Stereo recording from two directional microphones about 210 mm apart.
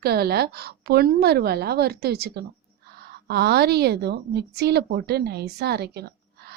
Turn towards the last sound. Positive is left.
turn(degrees=-50)  # may be behind; listen again after turning